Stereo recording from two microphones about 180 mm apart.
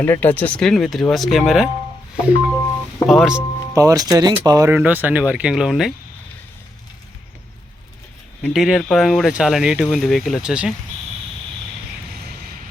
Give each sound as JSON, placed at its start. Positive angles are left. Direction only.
{"t": 0.0, "sound": "speech", "side_deg": 10}
{"t": 3.8, "sound": "speech", "side_deg": -20}
{"t": 8.4, "sound": "speech", "side_deg": 0}